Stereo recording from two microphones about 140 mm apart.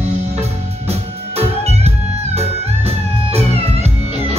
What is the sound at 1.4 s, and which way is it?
Music, 50° right (ahead or behind).